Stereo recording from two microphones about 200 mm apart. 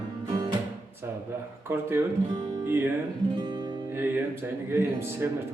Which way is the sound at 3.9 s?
10° right (ahead or behind).